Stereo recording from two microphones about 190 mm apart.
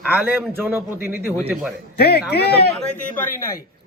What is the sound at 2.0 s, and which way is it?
Speech, 60° left (ahead or behind).